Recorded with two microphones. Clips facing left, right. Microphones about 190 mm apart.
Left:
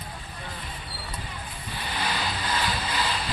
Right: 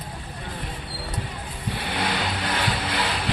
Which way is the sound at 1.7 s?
60° right (ahead or behind).